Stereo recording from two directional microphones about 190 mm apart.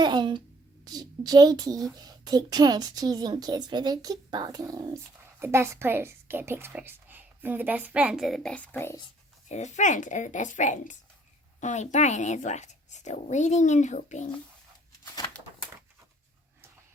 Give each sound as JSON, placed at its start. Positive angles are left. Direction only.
{"t": 0.0, "sound": "a woman's voice", "side_deg": -25}
{"t": 9.5, "sound": "speech", "side_deg": 40}